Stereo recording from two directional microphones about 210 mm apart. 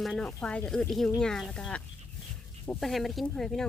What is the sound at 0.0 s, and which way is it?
Speech, 5° left (ahead or behind).